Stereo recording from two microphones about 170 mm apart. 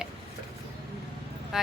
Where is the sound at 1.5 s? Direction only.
Centre (ahead or behind).